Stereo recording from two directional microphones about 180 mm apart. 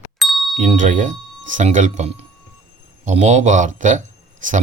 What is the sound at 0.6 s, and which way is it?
Speech, 45° right (ahead or behind).